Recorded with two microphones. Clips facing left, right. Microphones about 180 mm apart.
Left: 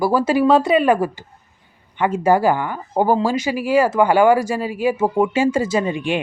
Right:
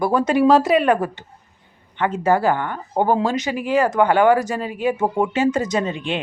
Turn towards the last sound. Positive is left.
turn(degrees=10)  # may be behind; listen again after turning